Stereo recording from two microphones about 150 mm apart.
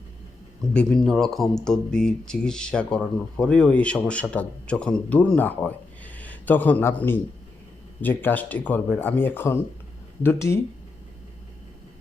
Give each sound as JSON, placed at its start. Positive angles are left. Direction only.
{"t": 0.7, "sound": "speech", "side_deg": 5}